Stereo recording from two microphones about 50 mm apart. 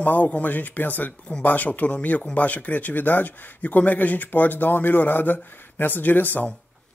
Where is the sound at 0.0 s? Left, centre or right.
Left.